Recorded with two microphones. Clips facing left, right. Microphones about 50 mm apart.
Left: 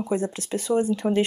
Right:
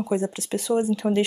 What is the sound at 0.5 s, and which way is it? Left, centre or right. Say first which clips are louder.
Speech: right 1 dB; centre.